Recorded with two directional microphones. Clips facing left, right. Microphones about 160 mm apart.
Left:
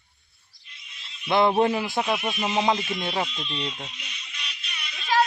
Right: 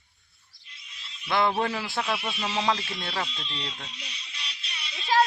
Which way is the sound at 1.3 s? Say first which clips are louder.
Left 5 dB; 20° left (ahead or behind).